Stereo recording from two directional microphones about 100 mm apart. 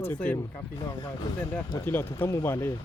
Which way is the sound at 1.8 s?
25° left (ahead or behind).